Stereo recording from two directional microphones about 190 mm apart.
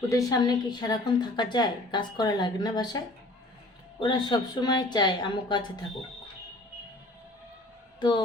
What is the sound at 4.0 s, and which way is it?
A woman's voice, 20° left (ahead or behind).